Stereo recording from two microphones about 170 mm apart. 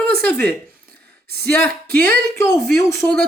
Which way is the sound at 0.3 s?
10° left (ahead or behind).